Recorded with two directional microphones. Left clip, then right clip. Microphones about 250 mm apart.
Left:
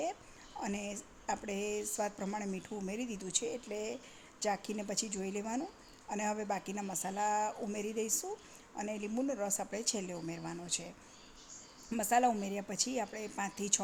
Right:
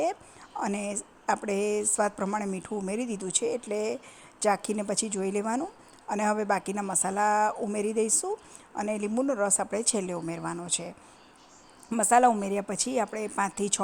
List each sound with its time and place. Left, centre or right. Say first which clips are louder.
0.6 s a woman's voice: right 9 dB; centre